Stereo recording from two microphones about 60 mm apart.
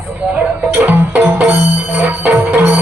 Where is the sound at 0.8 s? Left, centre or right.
Right.